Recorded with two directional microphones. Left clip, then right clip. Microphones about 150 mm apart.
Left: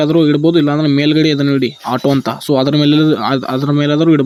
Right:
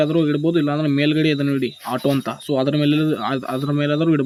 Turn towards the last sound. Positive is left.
turn(degrees=35)  # may be behind; listen again after turning